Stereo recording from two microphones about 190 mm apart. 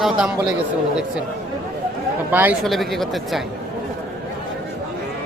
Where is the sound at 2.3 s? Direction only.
10° right (ahead or behind).